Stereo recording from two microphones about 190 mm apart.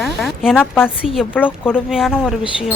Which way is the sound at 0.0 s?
Centre (ahead or behind).